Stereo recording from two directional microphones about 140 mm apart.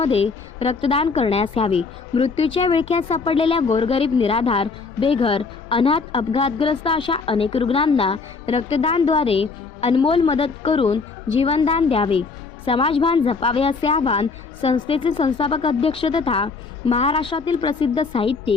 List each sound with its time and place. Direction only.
0.0 s a woman's voice: 45° left (ahead or behind)